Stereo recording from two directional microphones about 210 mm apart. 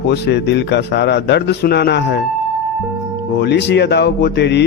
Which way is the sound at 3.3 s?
50° left (ahead or behind).